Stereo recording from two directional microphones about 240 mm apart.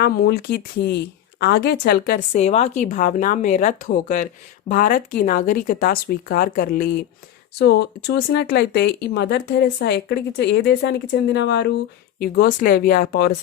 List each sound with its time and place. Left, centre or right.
0.0 s speech: left